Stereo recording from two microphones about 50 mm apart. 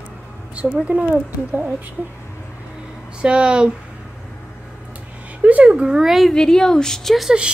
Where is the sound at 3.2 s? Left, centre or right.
Centre.